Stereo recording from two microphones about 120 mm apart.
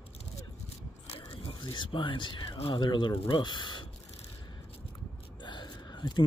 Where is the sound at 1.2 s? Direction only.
50° left (ahead or behind).